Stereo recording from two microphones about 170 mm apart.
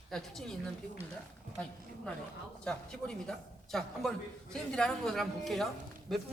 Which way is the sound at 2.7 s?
5° left (ahead or behind).